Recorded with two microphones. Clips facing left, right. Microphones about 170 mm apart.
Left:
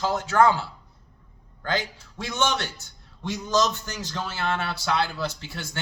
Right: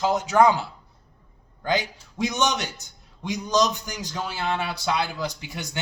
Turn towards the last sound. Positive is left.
turn(degrees=-15)  # may be behind; listen again after turning